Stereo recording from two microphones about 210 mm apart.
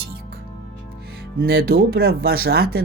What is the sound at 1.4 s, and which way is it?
Speech, 45° right (ahead or behind).